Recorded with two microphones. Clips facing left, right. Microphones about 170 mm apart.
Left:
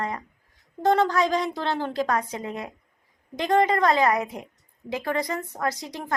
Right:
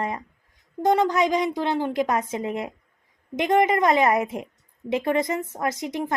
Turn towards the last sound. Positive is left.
turn(degrees=-20)  # may be behind; listen again after turning